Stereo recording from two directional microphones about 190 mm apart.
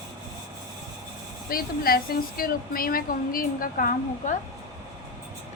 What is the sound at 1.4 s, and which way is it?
A woman's voice, 50° left (ahead or behind).